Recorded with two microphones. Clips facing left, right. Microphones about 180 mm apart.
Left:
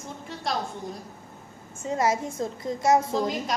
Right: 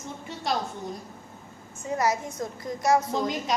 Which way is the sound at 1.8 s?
25° left (ahead or behind).